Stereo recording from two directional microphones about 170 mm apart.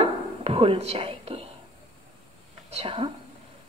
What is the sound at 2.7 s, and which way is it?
Speech, 35° right (ahead or behind).